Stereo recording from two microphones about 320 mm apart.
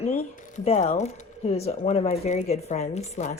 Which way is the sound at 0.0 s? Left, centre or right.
Centre.